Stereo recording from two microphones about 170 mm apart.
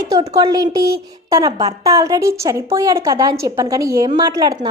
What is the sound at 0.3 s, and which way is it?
A woman's voice, 20° right (ahead or behind).